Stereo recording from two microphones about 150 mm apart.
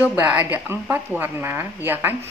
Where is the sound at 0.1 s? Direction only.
10° right (ahead or behind).